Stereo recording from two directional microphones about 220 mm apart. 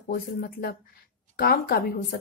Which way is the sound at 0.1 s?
40° left (ahead or behind).